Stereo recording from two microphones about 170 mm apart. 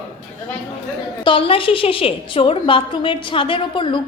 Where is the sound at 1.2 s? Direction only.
35° left (ahead or behind).